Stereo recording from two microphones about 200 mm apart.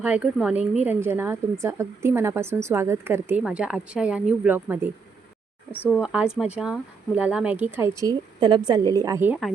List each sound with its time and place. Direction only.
0.0 s speech: 5° right (ahead or behind)
5.7 s speech: 10° left (ahead or behind)
6.0 s speech: 5° right (ahead or behind)
8.0 s speech: 25° right (ahead or behind)